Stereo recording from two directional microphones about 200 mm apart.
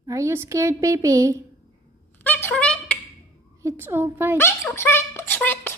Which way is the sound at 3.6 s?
10° right (ahead or behind).